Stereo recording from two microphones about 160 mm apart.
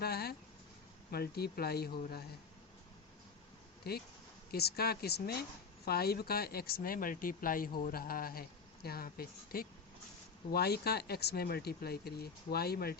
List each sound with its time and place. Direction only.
0.0 s a sound: 80° left
1.1 s a woman's voice: 75° left (ahead or behind)
3.9 s a woman's voice: 80° left
10.5 s speech: 85° left